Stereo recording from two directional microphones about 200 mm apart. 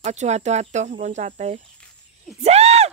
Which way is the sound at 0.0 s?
35° right (ahead or behind).